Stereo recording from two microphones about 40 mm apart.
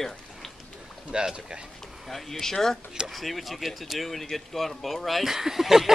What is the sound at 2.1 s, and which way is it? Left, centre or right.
A man's voice, centre.